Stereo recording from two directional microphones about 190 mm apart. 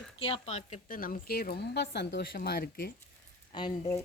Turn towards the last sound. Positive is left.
turn(degrees=20)  # may be behind; listen again after turning